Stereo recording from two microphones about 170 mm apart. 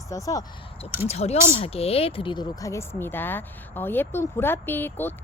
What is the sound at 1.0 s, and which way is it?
Speech, 40° left (ahead or behind).